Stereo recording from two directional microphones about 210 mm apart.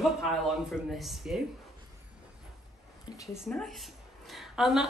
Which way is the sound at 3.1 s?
15° left (ahead or behind).